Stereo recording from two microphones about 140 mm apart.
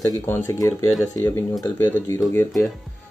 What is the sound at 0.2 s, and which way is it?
Speech, 20° left (ahead or behind).